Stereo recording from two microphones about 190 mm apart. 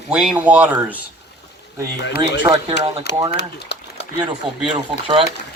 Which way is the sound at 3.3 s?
65° left (ahead or behind).